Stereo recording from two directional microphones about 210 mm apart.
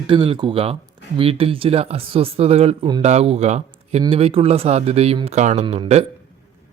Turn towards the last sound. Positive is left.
turn(degrees=-30)  # may be behind; listen again after turning